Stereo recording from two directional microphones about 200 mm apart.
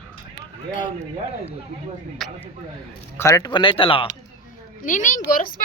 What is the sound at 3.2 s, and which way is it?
Speech, 15° left (ahead or behind).